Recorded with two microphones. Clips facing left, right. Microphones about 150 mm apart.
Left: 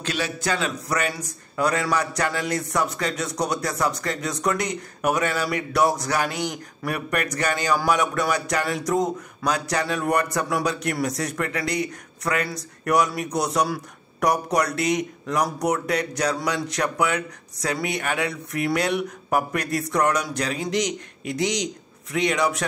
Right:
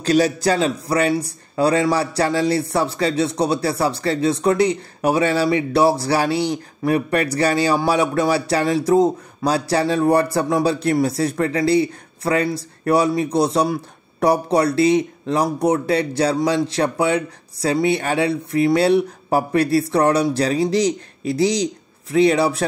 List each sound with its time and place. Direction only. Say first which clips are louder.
0.0 s a man's voice: right 11 dB; 35° right (ahead or behind)